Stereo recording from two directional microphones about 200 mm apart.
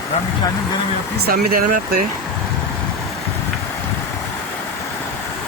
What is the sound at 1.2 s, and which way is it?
Speech, 50° right (ahead or behind).